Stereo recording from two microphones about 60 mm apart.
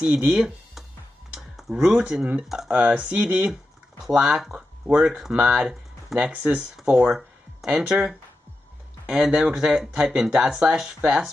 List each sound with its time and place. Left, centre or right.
0.0 s speech: centre
1.3 s typing: centre
2.4 s a sound: centre
2.7 s speech: right
6.3 s speech: right
6.7 s speech: centre